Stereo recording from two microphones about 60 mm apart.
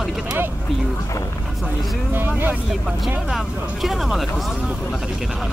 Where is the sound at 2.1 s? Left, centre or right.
Right.